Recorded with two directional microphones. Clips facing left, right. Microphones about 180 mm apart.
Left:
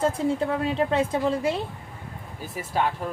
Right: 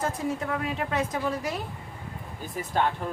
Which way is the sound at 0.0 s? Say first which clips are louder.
Left 6 dB; 30° left (ahead or behind).